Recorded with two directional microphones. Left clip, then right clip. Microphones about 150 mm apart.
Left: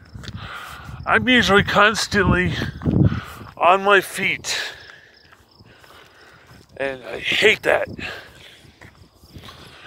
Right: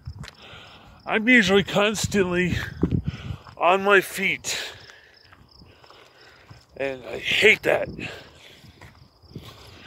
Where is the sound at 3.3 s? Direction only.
15° right (ahead or behind).